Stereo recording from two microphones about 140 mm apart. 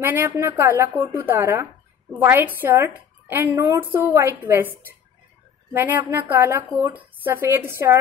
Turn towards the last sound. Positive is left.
turn(degrees=-15)  # may be behind; listen again after turning